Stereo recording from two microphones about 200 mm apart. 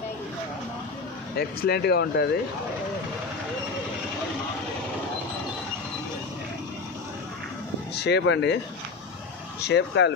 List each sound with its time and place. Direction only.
1.6 s speech: 55° left (ahead or behind)
7.9 s speech: 55° left (ahead or behind)
9.6 s speech: 60° left (ahead or behind)